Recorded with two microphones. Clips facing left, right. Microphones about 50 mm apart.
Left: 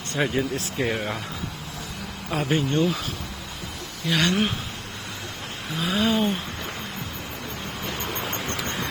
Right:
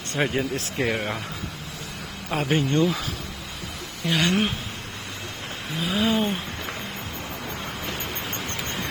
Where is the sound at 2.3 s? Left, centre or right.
Right.